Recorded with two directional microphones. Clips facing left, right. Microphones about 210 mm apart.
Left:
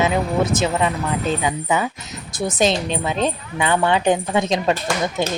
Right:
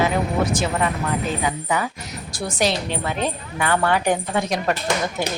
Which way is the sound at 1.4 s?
20° left (ahead or behind).